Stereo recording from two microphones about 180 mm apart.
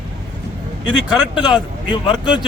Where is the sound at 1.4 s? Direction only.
25° left (ahead or behind).